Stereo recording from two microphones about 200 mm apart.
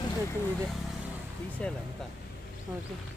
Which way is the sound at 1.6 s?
5° left (ahead or behind).